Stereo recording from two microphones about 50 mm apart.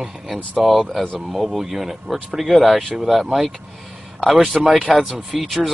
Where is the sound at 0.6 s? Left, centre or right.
Centre.